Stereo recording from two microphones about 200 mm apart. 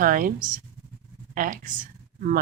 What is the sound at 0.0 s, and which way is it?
A woman's voice, 45° right (ahead or behind).